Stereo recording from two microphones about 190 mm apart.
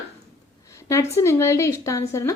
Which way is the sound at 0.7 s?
15° left (ahead or behind).